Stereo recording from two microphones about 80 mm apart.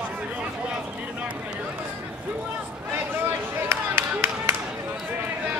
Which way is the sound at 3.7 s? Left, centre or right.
Right.